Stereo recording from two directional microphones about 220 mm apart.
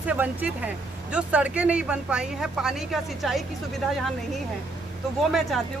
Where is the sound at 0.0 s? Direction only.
5° right (ahead or behind).